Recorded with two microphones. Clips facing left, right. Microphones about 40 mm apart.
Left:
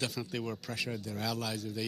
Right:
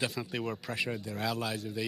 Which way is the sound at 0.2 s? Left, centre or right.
Centre.